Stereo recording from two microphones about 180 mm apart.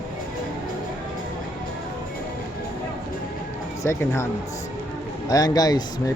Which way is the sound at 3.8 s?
15° left (ahead or behind).